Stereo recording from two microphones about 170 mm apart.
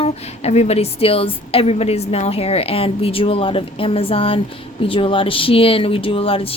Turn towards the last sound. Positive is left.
turn(degrees=30)  # may be behind; listen again after turning